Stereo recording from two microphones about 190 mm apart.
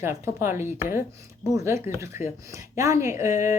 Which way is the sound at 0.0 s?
15° right (ahead or behind).